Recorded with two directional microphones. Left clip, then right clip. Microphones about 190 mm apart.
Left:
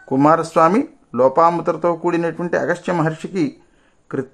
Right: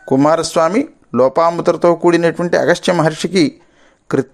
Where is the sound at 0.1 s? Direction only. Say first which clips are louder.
Right 2 dB; 20° right (ahead or behind).